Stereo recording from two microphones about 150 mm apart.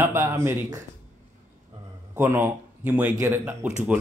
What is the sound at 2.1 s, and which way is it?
A man's voice, 15° right (ahead or behind).